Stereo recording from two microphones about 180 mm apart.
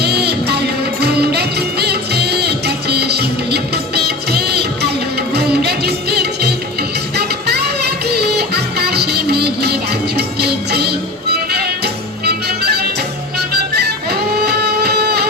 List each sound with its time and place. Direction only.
0.0 s music: 65° right (ahead or behind)